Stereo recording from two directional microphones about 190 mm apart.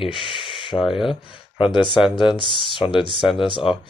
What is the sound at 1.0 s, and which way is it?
Speech, 25° left (ahead or behind).